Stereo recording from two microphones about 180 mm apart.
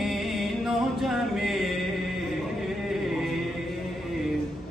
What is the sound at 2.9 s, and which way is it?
Music, centre (ahead or behind).